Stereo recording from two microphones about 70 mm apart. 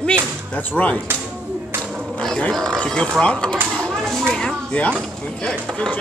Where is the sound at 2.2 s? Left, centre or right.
Centre.